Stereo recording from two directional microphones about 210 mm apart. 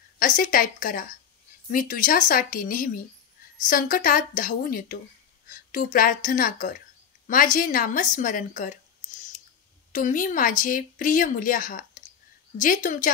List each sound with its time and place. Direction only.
0.2 s a woman's voice: 40° left (ahead or behind)
9.9 s speech: 40° left (ahead or behind)